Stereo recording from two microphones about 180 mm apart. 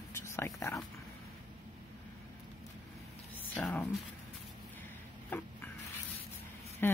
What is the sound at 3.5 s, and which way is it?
Speech, 10° left (ahead or behind).